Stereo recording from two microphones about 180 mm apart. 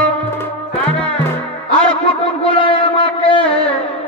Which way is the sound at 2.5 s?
30° left (ahead or behind).